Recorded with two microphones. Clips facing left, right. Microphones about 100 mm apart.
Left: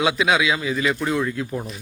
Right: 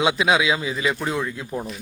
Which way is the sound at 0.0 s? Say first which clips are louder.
Even; 25° right (ahead or behind).